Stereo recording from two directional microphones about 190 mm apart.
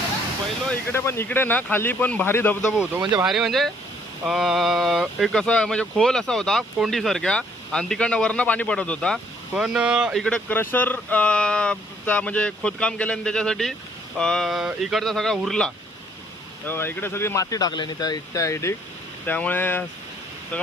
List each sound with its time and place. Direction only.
0.9 s speech: 15° left (ahead or behind)
2.7 s speech: 5° right (ahead or behind); by 19.8 s 10° left (ahead or behind)